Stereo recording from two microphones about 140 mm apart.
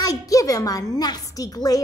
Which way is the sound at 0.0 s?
25° left (ahead or behind).